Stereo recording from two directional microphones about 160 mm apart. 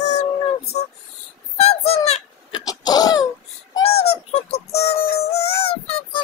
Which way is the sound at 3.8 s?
40° left (ahead or behind).